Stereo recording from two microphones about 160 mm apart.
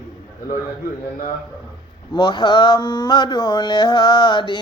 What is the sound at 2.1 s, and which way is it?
Mantra, 30° left (ahead or behind).